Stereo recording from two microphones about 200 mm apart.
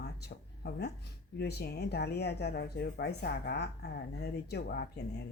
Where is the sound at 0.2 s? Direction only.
55° left (ahead or behind).